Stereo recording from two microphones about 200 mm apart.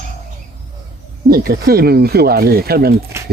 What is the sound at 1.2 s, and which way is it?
Speech, 50° right (ahead or behind).